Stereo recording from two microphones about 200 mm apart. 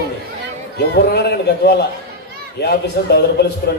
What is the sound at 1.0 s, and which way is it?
A man's voice, 55° left (ahead or behind).